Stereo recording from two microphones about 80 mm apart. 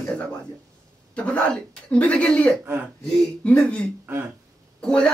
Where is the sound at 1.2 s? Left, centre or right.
Centre.